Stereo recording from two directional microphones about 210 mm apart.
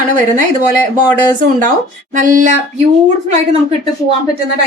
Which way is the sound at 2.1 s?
35° right (ahead or behind).